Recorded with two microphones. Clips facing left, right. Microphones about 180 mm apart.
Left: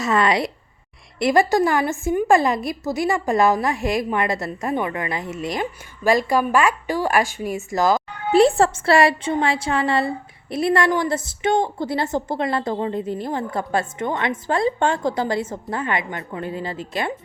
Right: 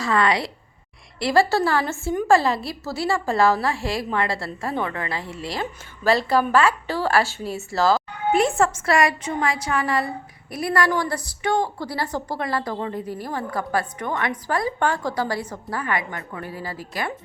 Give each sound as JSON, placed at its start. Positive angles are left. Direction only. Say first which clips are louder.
{"t": 0.0, "sound": "a woman's voice", "louder": "left 2 dB", "side_deg": 20}
{"t": 8.3, "sound": "a woman's voice", "louder": "left 4 dB", "side_deg": 35}